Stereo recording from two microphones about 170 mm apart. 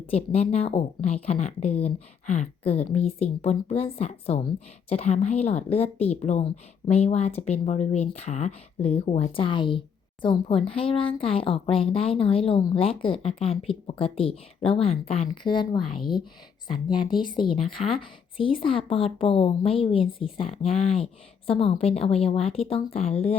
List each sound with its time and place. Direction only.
0.1 s a woman's voice: 35° left (ahead or behind)
17.1 s a woman's voice: 25° left (ahead or behind)